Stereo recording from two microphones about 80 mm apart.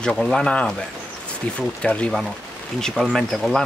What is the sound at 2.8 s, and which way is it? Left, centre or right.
Speech, centre.